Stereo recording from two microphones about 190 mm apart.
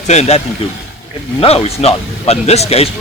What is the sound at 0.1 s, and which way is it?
A man's voice, 35° left (ahead or behind).